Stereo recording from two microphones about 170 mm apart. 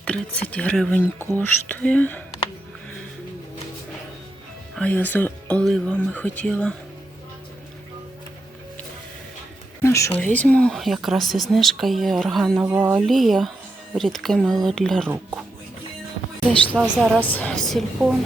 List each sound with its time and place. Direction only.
0.0 s speech: 10° left (ahead or behind)
4.7 s speech: 10° left (ahead or behind)
9.8 s speech: 15° left (ahead or behind)
15.0 s speech: 10° right (ahead or behind)
16.5 s speech: centre (ahead or behind)
17.2 s speech: 10° left (ahead or behind)